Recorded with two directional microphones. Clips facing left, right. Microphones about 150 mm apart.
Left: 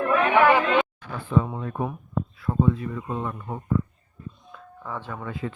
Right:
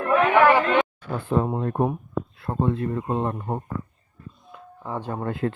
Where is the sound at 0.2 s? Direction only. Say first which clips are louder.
Right 2 dB; centre (ahead or behind).